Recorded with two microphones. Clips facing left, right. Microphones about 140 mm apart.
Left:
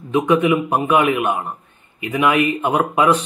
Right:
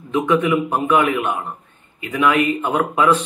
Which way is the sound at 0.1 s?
15° left (ahead or behind).